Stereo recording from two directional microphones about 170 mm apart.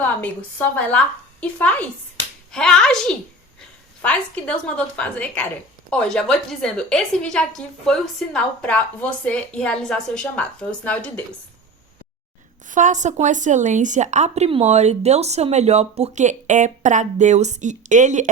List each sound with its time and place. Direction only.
0.2 s a woman's voice: 10° left (ahead or behind)
12.6 s a woman's voice: 50° right (ahead or behind)